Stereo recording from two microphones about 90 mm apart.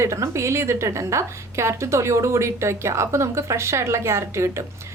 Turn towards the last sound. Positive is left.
turn(degrees=-30)  # may be behind; listen again after turning